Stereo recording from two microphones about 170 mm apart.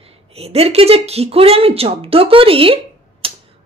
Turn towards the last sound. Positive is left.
turn(degrees=-35)  # may be behind; listen again after turning